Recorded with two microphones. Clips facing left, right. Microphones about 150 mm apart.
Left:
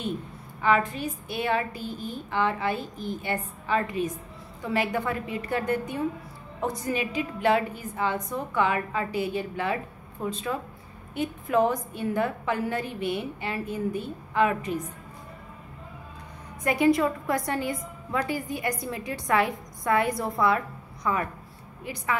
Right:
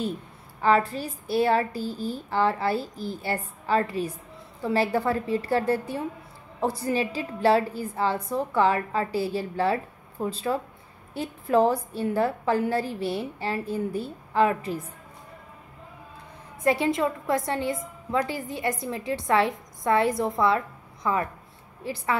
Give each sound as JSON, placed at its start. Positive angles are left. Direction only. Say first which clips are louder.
{"t": 0.6, "sound": "a woman's voice", "louder": "right 2 dB", "side_deg": -35}
{"t": 16.6, "sound": "a woman's voice", "louder": "left 1 dB", "side_deg": -25}